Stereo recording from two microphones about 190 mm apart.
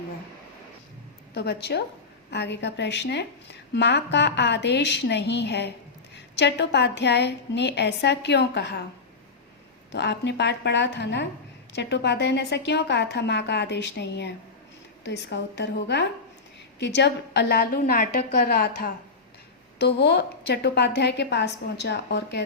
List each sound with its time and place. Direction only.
1.3 s a woman's voice: 60° left (ahead or behind)
9.9 s a woman's voice: 65° left (ahead or behind); by 18.9 s 50° left (ahead or behind)
19.8 s a woman's voice: 60° left (ahead or behind)